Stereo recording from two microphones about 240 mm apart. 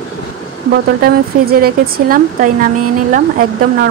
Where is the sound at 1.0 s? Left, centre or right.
Right.